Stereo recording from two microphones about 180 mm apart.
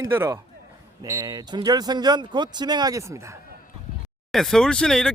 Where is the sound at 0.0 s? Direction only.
15° right (ahead or behind).